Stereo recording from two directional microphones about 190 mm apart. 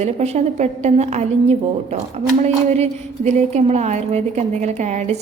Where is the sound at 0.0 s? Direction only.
35° right (ahead or behind).